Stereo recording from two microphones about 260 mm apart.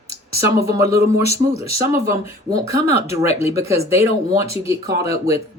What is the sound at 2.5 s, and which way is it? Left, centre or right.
Speech, centre.